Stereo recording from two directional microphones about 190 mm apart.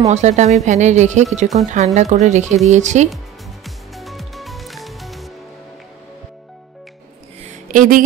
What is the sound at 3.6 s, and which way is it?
Music, centre (ahead or behind).